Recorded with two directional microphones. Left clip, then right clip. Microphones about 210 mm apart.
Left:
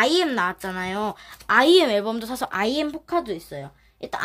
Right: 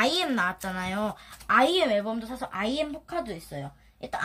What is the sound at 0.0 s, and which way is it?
A woman's voice, 40° left (ahead or behind).